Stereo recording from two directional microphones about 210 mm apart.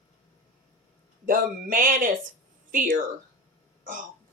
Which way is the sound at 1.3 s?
40° right (ahead or behind).